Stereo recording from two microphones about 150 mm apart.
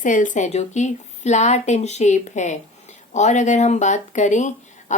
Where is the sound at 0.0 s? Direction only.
60° left (ahead or behind).